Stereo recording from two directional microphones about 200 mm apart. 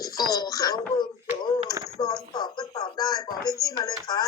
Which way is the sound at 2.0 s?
20° left (ahead or behind).